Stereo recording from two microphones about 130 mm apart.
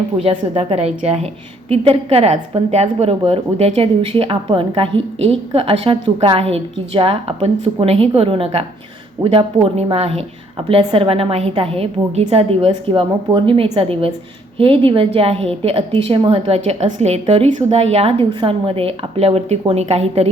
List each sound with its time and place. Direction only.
0.2 s a woman's voice: 50° right (ahead or behind)